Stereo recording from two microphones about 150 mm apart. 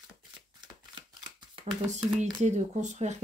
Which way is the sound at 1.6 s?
50° right (ahead or behind).